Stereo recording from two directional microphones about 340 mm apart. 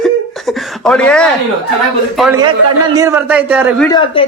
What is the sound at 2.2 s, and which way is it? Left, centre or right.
A man's voice, centre.